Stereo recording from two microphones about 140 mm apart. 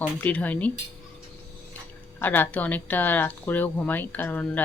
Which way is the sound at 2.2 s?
15° left (ahead or behind).